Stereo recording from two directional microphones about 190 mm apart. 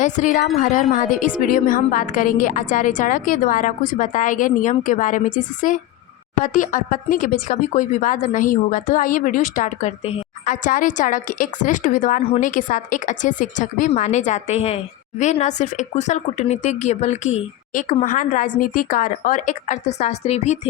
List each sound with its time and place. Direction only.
0.2 s speech: 40° left (ahead or behind)